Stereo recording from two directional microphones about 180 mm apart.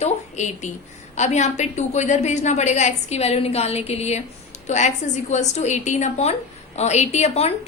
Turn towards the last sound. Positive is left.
turn(degrees=35)  # may be behind; listen again after turning